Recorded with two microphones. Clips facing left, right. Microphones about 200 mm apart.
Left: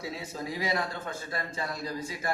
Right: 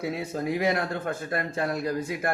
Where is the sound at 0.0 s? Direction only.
60° right (ahead or behind).